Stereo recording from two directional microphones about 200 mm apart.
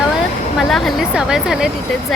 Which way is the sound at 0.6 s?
Centre (ahead or behind).